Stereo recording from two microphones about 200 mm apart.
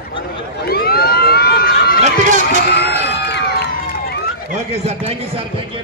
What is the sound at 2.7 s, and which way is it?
Crowd, 55° left (ahead or behind).